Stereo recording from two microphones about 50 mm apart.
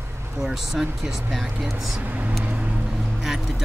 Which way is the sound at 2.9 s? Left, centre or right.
Centre.